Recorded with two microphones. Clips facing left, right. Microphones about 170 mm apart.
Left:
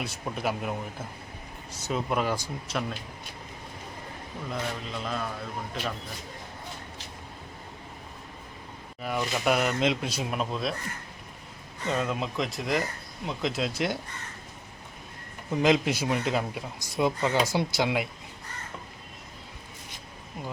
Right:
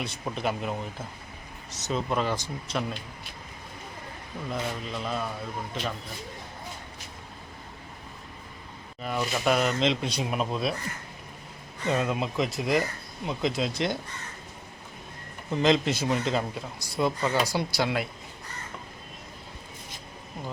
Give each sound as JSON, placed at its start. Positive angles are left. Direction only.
{"t": 0.0, "sound": "speech", "side_deg": 5}
{"t": 4.5, "sound": "speech", "side_deg": -5}
{"t": 9.0, "sound": "speech", "side_deg": 5}
{"t": 11.9, "sound": "speech", "side_deg": -5}
{"t": 15.4, "sound": "speech", "side_deg": 10}